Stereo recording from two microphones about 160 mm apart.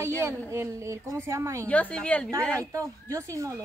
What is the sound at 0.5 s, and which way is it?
A woman's voice, 20° right (ahead or behind).